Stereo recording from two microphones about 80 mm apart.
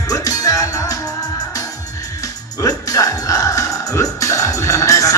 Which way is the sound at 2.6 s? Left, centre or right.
Left.